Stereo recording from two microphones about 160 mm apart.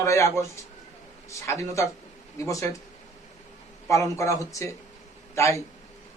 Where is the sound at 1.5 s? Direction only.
20° left (ahead or behind).